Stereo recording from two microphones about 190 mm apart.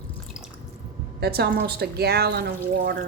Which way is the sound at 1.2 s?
55° right (ahead or behind).